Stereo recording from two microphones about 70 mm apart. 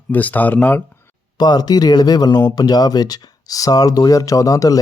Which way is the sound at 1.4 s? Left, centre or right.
Left.